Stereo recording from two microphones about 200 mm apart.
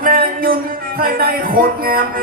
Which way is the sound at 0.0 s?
45° right (ahead or behind).